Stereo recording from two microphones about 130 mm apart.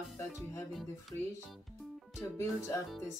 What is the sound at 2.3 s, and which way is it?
Speech, 20° left (ahead or behind).